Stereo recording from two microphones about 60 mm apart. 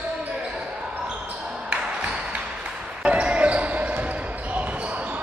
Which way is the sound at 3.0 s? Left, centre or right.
Centre.